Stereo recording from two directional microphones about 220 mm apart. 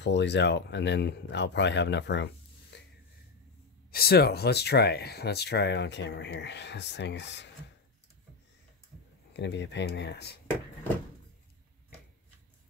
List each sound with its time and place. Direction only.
0.0 s speech: 50° left (ahead or behind)
2.7 s a sound: 50° left (ahead or behind)
3.9 s speech: 45° left (ahead or behind)
9.3 s speech: 55° left (ahead or behind)